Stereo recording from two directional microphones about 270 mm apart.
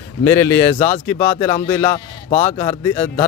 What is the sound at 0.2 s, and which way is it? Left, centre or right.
Speech, centre.